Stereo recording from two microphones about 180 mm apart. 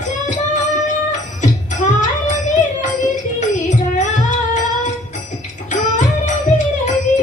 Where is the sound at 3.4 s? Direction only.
45° left (ahead or behind).